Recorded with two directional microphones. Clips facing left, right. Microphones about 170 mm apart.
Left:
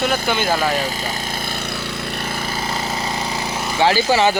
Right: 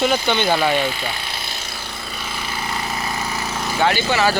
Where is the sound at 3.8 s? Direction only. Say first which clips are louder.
Left 3 dB; 30° left (ahead or behind).